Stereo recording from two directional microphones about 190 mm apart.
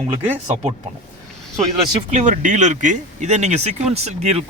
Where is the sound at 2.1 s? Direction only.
40° right (ahead or behind).